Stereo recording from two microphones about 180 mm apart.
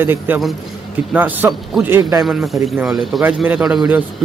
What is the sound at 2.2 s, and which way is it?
A man's voice, centre (ahead or behind).